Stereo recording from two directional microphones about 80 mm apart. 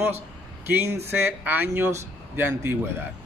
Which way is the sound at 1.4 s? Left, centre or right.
Right.